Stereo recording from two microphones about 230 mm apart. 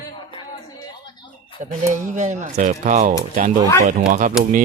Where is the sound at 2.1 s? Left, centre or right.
Right.